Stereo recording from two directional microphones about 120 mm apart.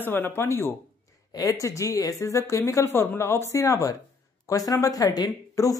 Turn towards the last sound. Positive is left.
turn(degrees=30)  # may be behind; listen again after turning